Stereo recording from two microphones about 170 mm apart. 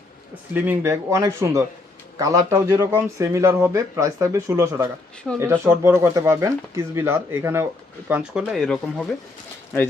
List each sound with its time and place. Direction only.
0.5 s speech: 10° right (ahead or behind)